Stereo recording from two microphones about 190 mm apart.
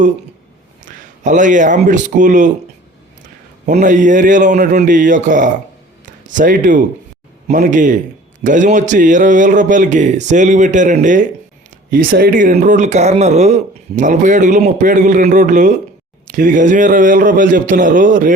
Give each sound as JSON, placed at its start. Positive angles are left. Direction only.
{"t": 0.9, "sound": "speech", "side_deg": -40}
{"t": 3.7, "sound": "a man's voice", "side_deg": -40}